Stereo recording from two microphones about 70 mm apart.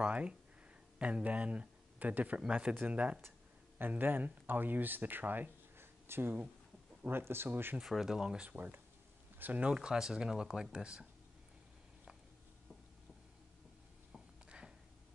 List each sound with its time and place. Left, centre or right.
0.0 s speech: centre
3.2 s speech: right
7.8 s speech: centre
8.5 s speech: right
9.7 s speech: centre
14.1 s a sound: centre